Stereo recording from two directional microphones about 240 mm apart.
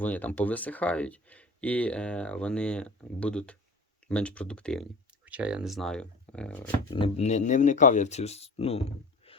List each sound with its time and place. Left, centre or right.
0.0 s speech: centre
6.9 s speech: left